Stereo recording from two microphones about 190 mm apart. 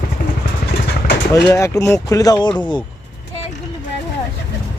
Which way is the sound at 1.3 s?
15° left (ahead or behind).